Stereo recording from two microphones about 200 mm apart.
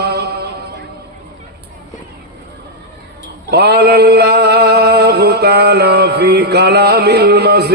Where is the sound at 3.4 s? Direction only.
55° right (ahead or behind).